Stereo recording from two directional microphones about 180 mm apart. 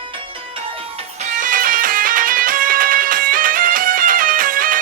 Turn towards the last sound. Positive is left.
turn(degrees=-50)  # may be behind; listen again after turning